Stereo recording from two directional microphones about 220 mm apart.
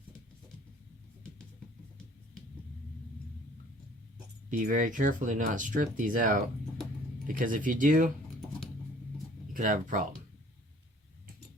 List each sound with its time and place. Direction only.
4.4 s speech: 35° right (ahead or behind)
9.5 s speech: 40° right (ahead or behind)